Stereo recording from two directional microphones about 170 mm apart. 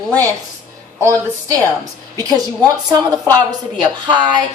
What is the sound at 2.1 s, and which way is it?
Speech, 20° right (ahead or behind).